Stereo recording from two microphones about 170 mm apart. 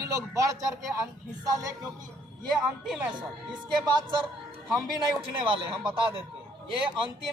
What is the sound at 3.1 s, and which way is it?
A man's voice, 25° right (ahead or behind).